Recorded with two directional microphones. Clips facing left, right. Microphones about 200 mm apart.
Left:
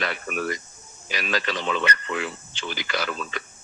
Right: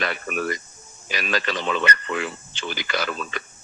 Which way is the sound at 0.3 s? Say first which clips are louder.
Right 2 dB; 45° right (ahead or behind).